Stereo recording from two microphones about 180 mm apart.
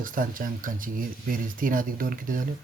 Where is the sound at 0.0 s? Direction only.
50° right (ahead or behind).